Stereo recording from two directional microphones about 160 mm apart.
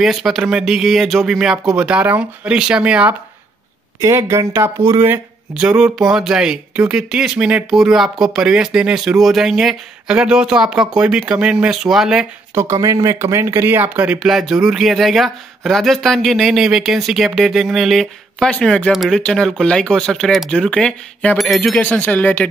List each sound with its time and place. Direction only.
0.0 s speech: centre (ahead or behind)
12.5 s speech: 20° right (ahead or behind); by 22.5 s 10° left (ahead or behind)